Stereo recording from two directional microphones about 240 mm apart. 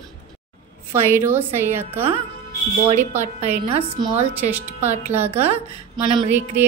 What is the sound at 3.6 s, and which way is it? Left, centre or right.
Speech, right.